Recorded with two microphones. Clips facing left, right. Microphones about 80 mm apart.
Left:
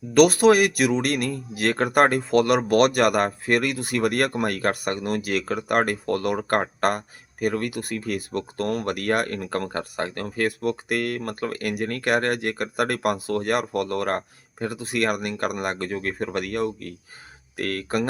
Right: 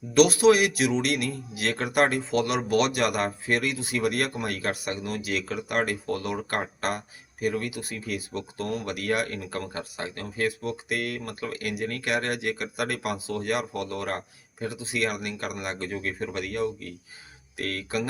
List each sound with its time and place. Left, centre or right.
0.1 s speech: left